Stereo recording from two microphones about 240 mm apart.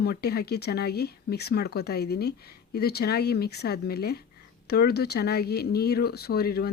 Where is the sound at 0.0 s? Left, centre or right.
Left.